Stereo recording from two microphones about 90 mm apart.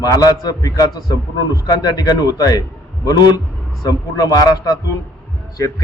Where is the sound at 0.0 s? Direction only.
45° left (ahead or behind).